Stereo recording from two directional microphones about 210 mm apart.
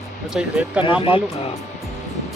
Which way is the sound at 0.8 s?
25° left (ahead or behind).